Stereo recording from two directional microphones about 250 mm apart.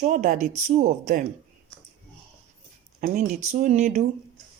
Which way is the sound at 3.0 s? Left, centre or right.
Right.